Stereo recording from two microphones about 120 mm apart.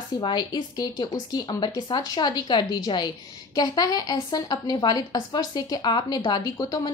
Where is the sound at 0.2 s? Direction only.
35° left (ahead or behind).